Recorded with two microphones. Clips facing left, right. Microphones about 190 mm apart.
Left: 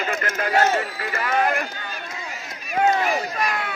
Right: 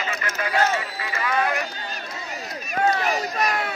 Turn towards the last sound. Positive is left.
turn(degrees=-40)  # may be behind; listen again after turning